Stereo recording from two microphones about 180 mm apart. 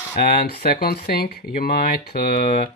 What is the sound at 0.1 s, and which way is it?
Speech, 55° left (ahead or behind).